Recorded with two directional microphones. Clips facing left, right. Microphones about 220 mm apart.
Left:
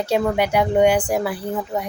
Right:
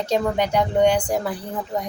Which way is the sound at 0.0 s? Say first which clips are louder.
Left 2 dB; 10° left (ahead or behind).